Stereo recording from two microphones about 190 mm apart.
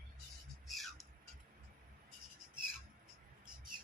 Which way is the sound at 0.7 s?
Centre (ahead or behind).